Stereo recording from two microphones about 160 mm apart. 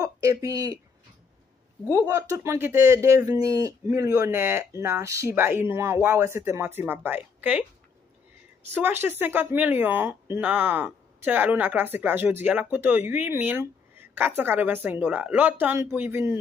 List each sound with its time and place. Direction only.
0.0 s speech: 20° right (ahead or behind)
1.9 s speech: 20° right (ahead or behind)
7.3 s a sound: 10° right (ahead or behind)
8.7 s speech: 15° right (ahead or behind)